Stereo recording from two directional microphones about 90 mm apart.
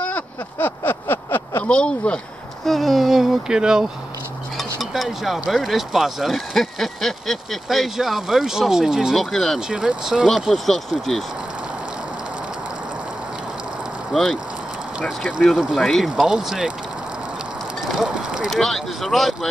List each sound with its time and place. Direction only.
0.0 s a sound: 20° left (ahead or behind)
1.6 s speech: 10° left (ahead or behind)
14.1 s speech: 5° left (ahead or behind)
15.4 s speech: 5° left (ahead or behind)
16.2 s speech: 10° right (ahead or behind)
17.9 s a sound: 10° right (ahead or behind)
18.5 s speech: 5° left (ahead or behind)